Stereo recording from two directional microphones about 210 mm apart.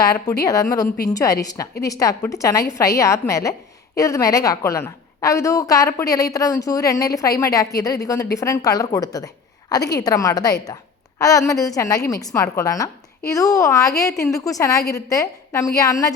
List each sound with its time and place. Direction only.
0.4 s a woman's voice: 15° left (ahead or behind)